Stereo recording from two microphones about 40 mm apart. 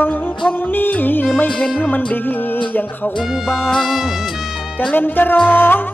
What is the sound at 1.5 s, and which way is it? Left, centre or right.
Music, centre.